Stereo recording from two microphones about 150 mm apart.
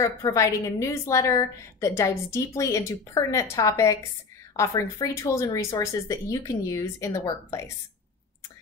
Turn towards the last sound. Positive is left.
turn(degrees=20)  # may be behind; listen again after turning